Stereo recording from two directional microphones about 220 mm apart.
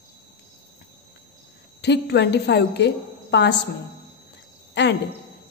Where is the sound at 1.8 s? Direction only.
50° left (ahead or behind).